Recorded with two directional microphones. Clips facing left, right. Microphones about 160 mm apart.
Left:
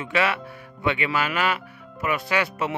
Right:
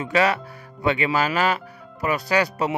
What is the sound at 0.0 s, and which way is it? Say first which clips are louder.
A man's voice: right 3 dB; 40° right (ahead or behind).